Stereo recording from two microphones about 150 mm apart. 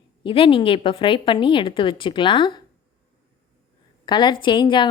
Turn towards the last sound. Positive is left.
turn(degrees=30)  # may be behind; listen again after turning